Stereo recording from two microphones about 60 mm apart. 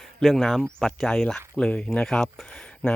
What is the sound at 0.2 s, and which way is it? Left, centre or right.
Speech, centre.